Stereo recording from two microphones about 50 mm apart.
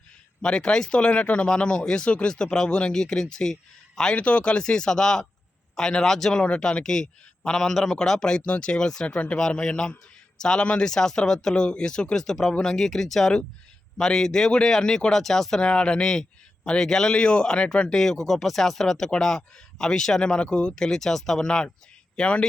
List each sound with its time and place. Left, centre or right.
0.4 s a man's voice: centre
4.1 s a man's voice: left; by 6.4 s centre
6.4 s a man's voice: centre